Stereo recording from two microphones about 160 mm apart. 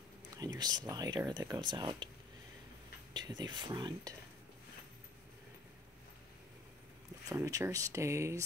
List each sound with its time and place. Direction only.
0.4 s speech: 25° right (ahead or behind)
3.1 s speech: 25° right (ahead or behind)
7.2 s speech: 20° right (ahead or behind)